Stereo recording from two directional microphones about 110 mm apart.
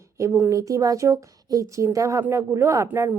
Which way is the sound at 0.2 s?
25° right (ahead or behind).